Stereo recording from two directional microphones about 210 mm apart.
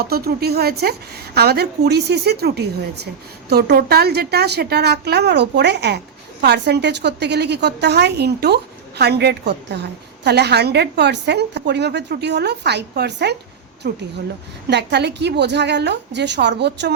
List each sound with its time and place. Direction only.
0.0 s a woman's voice: 50° right (ahead or behind)